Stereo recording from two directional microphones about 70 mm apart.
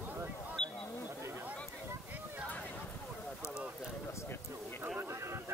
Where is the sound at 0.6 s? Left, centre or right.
Centre.